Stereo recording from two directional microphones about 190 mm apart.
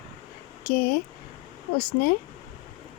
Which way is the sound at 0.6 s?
55° left (ahead or behind).